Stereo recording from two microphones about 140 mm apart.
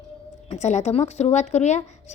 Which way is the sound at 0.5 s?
55° left (ahead or behind).